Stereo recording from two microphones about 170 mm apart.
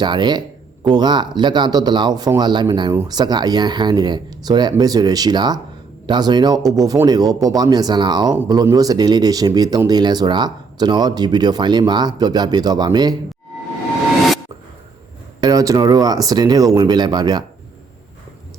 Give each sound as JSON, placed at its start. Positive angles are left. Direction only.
{"t": 0.0, "sound": "speech", "side_deg": -25}
{"t": 15.4, "sound": "speech", "side_deg": -20}